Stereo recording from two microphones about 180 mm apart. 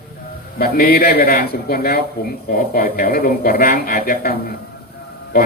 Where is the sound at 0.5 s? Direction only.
55° left (ahead or behind).